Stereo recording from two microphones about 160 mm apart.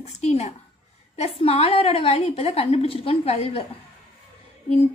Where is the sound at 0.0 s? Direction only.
45° left (ahead or behind).